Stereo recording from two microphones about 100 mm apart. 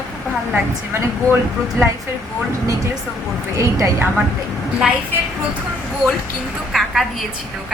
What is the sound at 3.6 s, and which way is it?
Speech, 30° right (ahead or behind).